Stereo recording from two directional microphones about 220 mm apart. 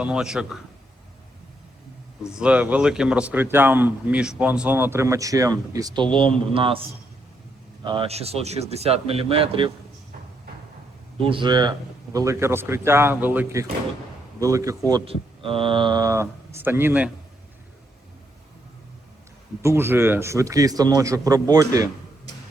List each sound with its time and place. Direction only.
0.0 s a man's voice: 5° right (ahead or behind)
2.2 s speech: 5° right (ahead or behind); by 6.8 s 25° right (ahead or behind)
7.9 s speech: 25° right (ahead or behind)
11.2 s speech: 25° right (ahead or behind)
19.6 s speech: 10° right (ahead or behind)